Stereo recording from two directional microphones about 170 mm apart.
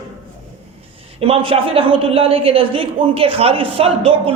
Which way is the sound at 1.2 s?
35° right (ahead or behind).